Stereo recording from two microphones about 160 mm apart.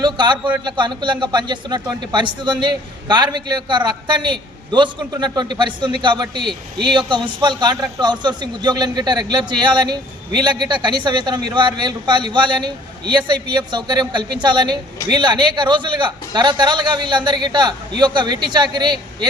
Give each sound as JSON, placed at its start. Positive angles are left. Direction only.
{"t": 0.0, "sound": "a man's voice", "side_deg": -30}